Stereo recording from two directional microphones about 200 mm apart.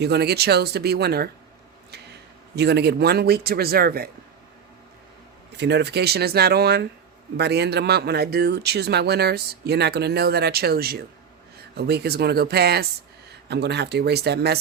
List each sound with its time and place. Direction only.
0.0 s speech: 55° right (ahead or behind)
2.6 s speech: 55° right (ahead or behind)
5.5 s speech: 55° right (ahead or behind)